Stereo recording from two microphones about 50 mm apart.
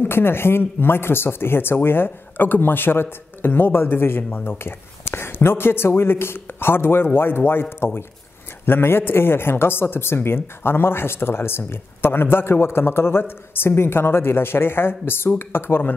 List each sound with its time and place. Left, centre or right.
0.0 s speech: left
4.2 s speech: left
4.5 s speech: left
8.6 s speech: left